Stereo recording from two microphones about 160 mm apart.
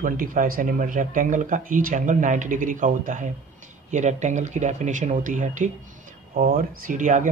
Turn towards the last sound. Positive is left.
turn(degrees=-55)  # may be behind; listen again after turning